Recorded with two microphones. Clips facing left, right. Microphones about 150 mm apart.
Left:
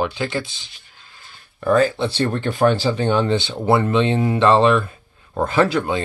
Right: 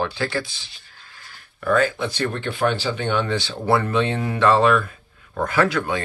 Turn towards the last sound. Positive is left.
turn(degrees=25)  # may be behind; listen again after turning